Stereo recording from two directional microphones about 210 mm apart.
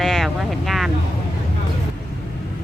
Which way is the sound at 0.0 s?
Centre (ahead or behind).